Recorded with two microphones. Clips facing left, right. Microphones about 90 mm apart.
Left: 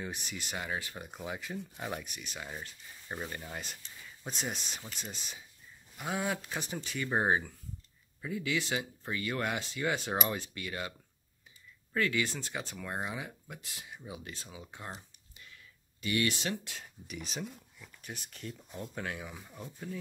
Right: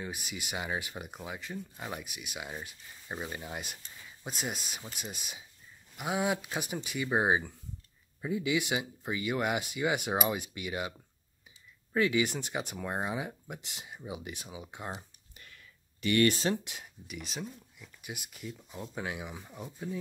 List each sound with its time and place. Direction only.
0.0 s speech: 5° right (ahead or behind)
1.2 s speech: centre (ahead or behind)
8.2 s speech: 20° right (ahead or behind)
16.0 s speech: 65° right (ahead or behind)
16.3 s speech: 35° right (ahead or behind)
16.6 s speech: 15° right (ahead or behind)
17.1 s speech: centre (ahead or behind)